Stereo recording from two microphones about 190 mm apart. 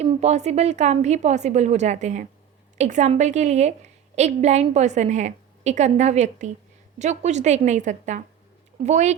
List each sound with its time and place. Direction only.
0.0 s a woman's voice: 35° right (ahead or behind)